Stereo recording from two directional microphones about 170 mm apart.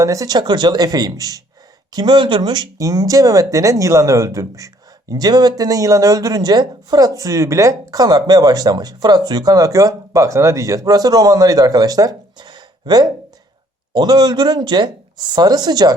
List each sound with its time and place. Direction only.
0.0 s speech: 20° right (ahead or behind)